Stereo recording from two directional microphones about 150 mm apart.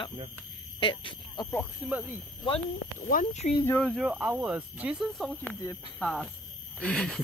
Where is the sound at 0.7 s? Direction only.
35° left (ahead or behind).